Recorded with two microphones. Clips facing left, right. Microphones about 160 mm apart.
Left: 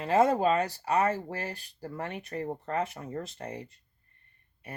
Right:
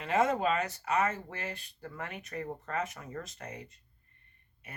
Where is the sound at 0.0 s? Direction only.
35° left (ahead or behind).